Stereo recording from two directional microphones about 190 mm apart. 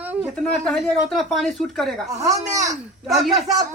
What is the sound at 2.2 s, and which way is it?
Speech, 15° right (ahead or behind).